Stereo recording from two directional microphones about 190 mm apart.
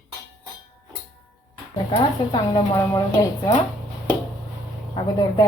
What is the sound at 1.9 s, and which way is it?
A woman's voice, 20° left (ahead or behind).